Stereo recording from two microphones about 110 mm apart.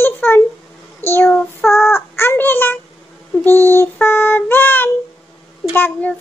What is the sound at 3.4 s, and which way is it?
Child singing, 20° left (ahead or behind).